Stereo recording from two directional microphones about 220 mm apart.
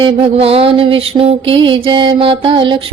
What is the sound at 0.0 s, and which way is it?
Mantra, 25° right (ahead or behind).